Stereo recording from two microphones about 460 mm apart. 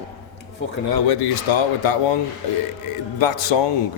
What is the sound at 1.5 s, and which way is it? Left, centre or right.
Speech, left.